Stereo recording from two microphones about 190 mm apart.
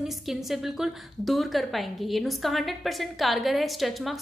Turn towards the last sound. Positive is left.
turn(degrees=0)  # may be behind; listen again after turning